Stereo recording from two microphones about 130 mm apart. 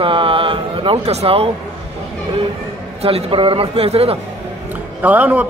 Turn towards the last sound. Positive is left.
turn(degrees=-10)  # may be behind; listen again after turning